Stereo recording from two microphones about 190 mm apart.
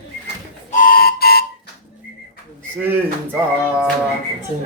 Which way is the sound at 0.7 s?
45° left (ahead or behind).